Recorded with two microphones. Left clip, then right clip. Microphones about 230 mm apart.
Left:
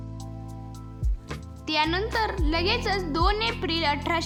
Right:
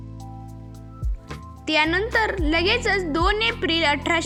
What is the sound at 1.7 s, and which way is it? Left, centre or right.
A woman's voice, centre.